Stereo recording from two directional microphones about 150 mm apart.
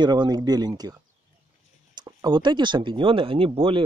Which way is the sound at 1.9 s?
25° right (ahead or behind).